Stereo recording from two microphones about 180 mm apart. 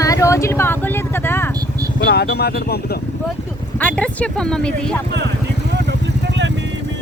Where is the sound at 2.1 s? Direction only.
65° left (ahead or behind).